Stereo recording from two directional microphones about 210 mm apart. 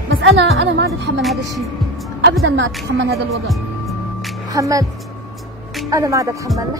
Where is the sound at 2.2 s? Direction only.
65° right (ahead or behind).